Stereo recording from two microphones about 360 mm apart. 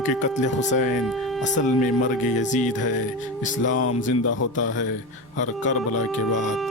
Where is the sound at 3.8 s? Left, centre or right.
Left.